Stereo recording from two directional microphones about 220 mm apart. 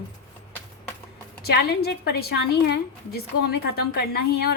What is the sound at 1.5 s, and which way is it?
A woman's voice, 45° left (ahead or behind).